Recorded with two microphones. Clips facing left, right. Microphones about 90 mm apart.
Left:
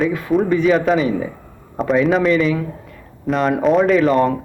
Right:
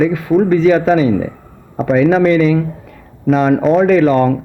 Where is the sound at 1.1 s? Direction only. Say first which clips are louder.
Right 5 dB; 20° right (ahead or behind).